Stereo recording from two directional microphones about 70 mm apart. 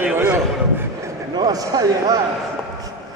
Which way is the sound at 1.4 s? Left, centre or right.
Right.